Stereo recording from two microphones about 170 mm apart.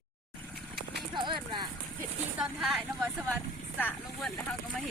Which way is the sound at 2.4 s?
Centre (ahead or behind).